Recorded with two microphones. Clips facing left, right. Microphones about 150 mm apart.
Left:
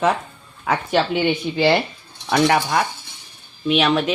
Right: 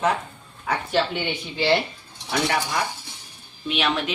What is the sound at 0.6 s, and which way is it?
Speech, 90° left.